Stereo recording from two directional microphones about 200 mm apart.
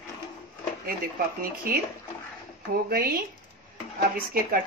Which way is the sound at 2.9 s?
50° right (ahead or behind).